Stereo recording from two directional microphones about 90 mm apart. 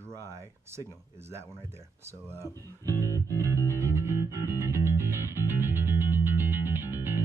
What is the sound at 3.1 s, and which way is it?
Music, 30° left (ahead or behind).